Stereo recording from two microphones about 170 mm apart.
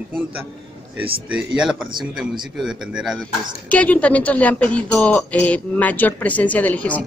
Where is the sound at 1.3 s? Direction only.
5° right (ahead or behind).